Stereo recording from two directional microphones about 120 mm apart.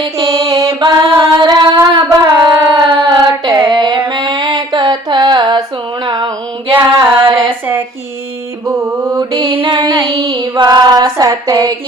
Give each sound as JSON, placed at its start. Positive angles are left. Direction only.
{"t": 0.2, "sound": "mantra", "side_deg": -25}
{"t": 0.8, "sound": "female singing", "side_deg": -35}
{"t": 2.0, "sound": "singing", "side_deg": -30}
{"t": 3.7, "sound": "a sound", "side_deg": -40}
{"t": 6.1, "sound": "female singing", "side_deg": -35}
{"t": 8.6, "sound": "mantra", "side_deg": -20}
{"t": 9.4, "sound": "female singing", "side_deg": -50}